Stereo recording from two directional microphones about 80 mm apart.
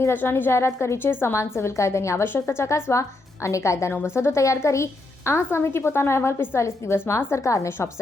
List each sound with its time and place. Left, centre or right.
0.0 s a woman's voice: left